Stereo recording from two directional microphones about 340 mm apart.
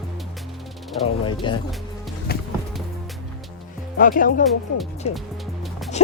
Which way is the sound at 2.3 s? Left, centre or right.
Left.